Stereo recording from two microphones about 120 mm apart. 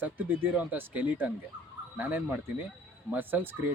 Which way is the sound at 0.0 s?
15° right (ahead or behind).